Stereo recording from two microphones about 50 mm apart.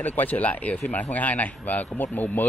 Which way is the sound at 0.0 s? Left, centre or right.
Left.